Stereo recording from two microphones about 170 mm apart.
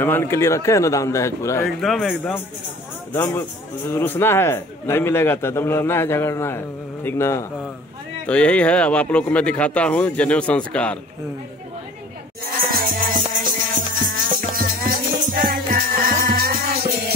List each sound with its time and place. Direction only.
0.0 s a man's voice: 15° left (ahead or behind)
1.7 s a man's voice: centre (ahead or behind)
12.4 s music: 55° right (ahead or behind)